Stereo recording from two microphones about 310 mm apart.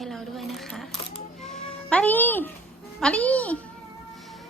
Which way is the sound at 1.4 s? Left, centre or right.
Centre.